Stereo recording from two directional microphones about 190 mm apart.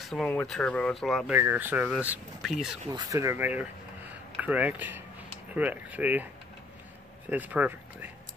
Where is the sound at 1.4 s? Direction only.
10° right (ahead or behind).